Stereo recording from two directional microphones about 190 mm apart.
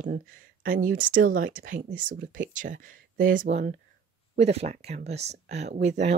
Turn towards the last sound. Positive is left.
turn(degrees=-35)  # may be behind; listen again after turning